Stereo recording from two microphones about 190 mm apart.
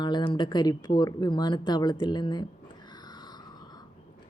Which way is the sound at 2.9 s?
20° left (ahead or behind).